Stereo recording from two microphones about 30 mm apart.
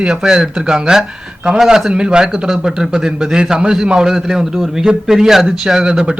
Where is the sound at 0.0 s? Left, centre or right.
Right.